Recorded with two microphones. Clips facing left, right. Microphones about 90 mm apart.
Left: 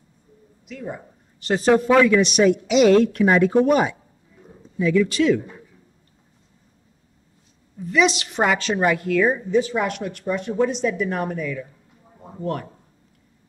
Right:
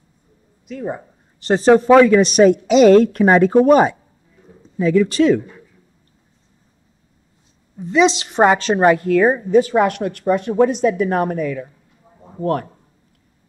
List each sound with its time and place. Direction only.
0.7 s a man's voice: 40° right (ahead or behind)
7.7 s a woman's voice: 25° right (ahead or behind); by 11.6 s 50° right (ahead or behind)